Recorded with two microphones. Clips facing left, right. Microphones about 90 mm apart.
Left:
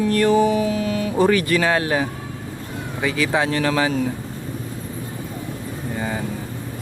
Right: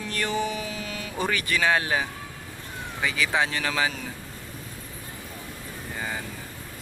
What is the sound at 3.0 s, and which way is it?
Speech, 15° left (ahead or behind).